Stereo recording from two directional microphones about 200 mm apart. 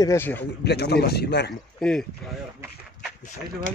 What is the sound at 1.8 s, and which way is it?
Speech, 5° left (ahead or behind).